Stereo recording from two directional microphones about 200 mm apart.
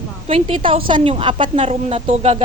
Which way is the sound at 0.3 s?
30° right (ahead or behind).